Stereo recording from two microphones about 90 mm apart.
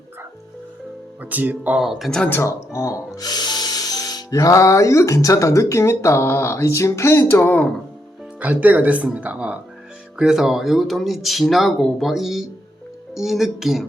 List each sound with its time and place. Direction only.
1.2 s speech: 20° right (ahead or behind)
1.8 s speech: 5° right (ahead or behind)
2.0 s speech: 5° left (ahead or behind)
2.3 s music: 30° left (ahead or behind)
3.2 s music: 50° left (ahead or behind); by 7.7 s 20° left (ahead or behind)
8.4 s speech: 15° right (ahead or behind)